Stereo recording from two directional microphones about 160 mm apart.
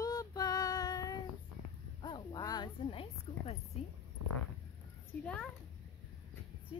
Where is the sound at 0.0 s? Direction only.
20° left (ahead or behind).